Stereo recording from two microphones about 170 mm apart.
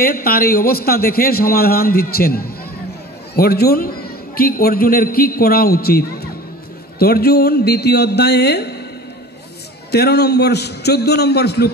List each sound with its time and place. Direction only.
0.0 s a man's voice: 60° left (ahead or behind)
9.8 s speech: 70° left (ahead or behind)